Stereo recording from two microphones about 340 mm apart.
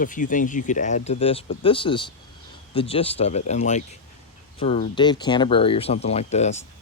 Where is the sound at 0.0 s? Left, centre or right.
Left.